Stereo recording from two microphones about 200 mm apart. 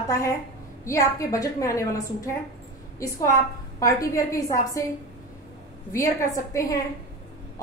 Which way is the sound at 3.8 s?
15° left (ahead or behind).